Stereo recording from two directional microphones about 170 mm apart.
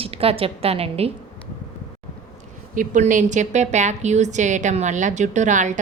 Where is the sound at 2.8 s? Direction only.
45° right (ahead or behind).